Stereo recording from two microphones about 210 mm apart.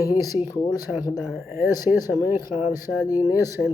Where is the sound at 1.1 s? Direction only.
5° right (ahead or behind).